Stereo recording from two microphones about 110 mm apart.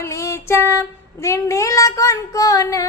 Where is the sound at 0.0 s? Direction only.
25° left (ahead or behind).